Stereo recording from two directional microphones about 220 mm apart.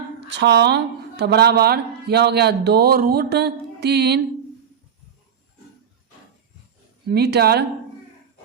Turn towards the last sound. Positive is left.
turn(degrees=-45)  # may be behind; listen again after turning